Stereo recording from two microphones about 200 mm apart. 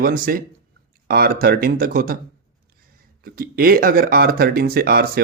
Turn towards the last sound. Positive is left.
turn(degrees=-50)  # may be behind; listen again after turning